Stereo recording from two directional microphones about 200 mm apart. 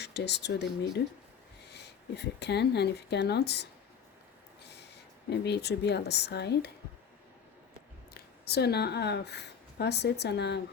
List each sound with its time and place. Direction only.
0.0 s speech: 60° left (ahead or behind)
4.6 s a sound: 55° left (ahead or behind)
5.3 s speech: 55° left (ahead or behind)
8.1 s speech: 55° left (ahead or behind)